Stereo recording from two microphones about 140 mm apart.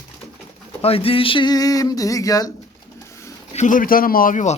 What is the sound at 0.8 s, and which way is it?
Speech, 45° left (ahead or behind).